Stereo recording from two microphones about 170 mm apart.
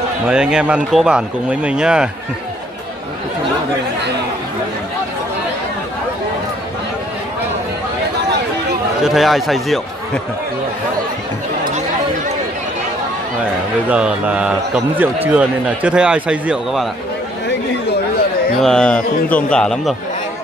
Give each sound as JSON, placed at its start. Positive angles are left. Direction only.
{"t": 0.3, "sound": "speech", "side_deg": -5}
{"t": 9.0, "sound": "speech", "side_deg": 0}
{"t": 13.8, "sound": "a man's voice", "side_deg": -5}
{"t": 18.6, "sound": "speech", "side_deg": 5}